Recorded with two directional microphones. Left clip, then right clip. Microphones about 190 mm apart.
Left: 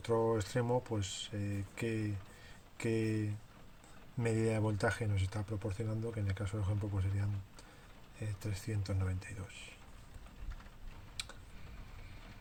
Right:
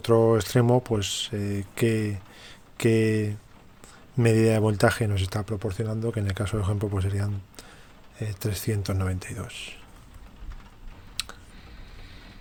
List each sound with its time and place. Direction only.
0.0 s speech: 50° right (ahead or behind)